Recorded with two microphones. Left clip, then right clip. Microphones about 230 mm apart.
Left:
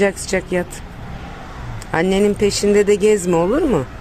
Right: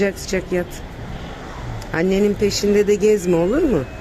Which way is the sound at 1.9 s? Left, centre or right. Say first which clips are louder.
Left 2 dB; centre.